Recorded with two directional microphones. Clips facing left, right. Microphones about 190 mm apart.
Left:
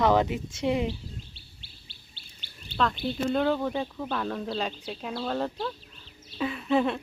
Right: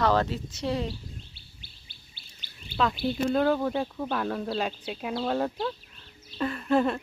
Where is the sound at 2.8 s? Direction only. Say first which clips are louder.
Right 1 dB; 5° right (ahead or behind).